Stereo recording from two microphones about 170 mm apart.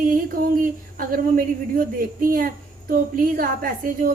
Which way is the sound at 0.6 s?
55° right (ahead or behind).